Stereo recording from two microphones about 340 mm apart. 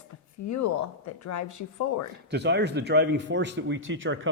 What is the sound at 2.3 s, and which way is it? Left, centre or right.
Speech, right.